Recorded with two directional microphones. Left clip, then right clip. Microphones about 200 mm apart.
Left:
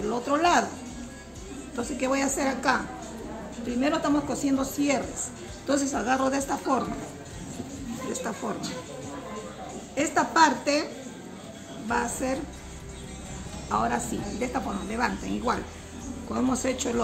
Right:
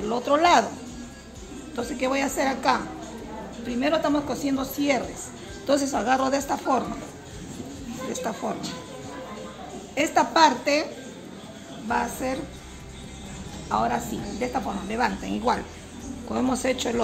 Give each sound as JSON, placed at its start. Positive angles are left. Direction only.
{"t": 0.1, "sound": "speech", "side_deg": -30}
{"t": 1.8, "sound": "speech", "side_deg": -20}
{"t": 3.8, "sound": "a woman's voice", "side_deg": -20}
{"t": 8.4, "sound": "a woman's voice", "side_deg": -20}
{"t": 9.9, "sound": "speech", "side_deg": -30}
{"t": 11.9, "sound": "a woman's voice", "side_deg": -15}
{"t": 13.7, "sound": "speech", "side_deg": -15}